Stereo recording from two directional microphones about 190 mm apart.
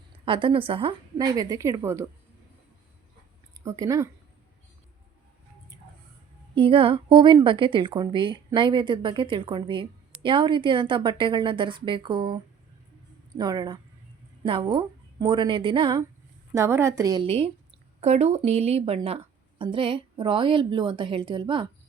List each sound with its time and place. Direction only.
0.3 s a woman's voice: 25° right (ahead or behind)
3.6 s a woman's voice: 15° right (ahead or behind)
6.6 s a woman's voice: 30° right (ahead or behind)
16.6 s a woman's voice: 15° right (ahead or behind)